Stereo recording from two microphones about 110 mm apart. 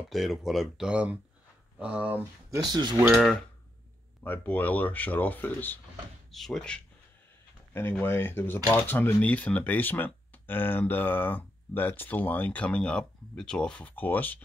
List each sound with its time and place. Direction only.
0.1 s speech: centre (ahead or behind)
2.7 s speech: 40° right (ahead or behind)
4.2 s speech: 15° left (ahead or behind)
6.3 s speech: 5° left (ahead or behind)
8.0 s speech: 20° left (ahead or behind)